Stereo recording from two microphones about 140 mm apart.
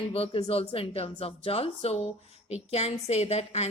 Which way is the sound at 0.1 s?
45° left (ahead or behind).